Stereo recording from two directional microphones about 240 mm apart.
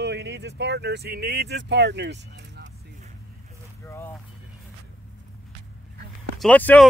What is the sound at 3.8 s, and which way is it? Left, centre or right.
Vehicle, centre.